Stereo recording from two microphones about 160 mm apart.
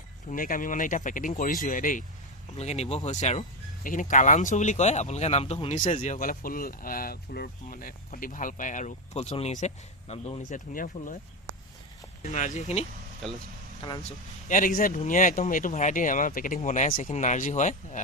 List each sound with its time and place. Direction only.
0.3 s speech: 60° left (ahead or behind)
2.6 s speech: 40° left (ahead or behind)
10.7 s speech: 55° left (ahead or behind)
12.2 s speech: 45° left (ahead or behind)
13.2 s speech: centre (ahead or behind)
13.8 s speech: 35° left (ahead or behind)
14.4 s speech: 60° left (ahead or behind)
16.6 s speech: 50° left (ahead or behind)